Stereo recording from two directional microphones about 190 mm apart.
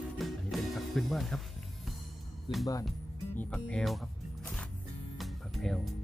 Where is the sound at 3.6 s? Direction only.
Centre (ahead or behind).